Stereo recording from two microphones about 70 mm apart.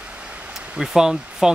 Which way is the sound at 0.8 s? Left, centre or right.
Centre.